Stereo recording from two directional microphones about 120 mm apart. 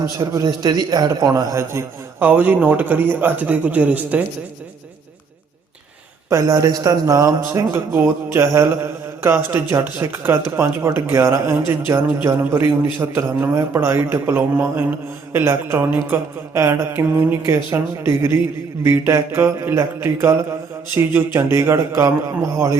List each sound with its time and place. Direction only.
0.2 s a man's voice: 30° right (ahead or behind); by 4.2 s 15° right (ahead or behind)
6.3 s speech: 30° right (ahead or behind)